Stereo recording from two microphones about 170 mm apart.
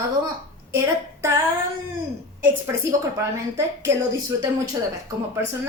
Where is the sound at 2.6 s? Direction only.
15° right (ahead or behind).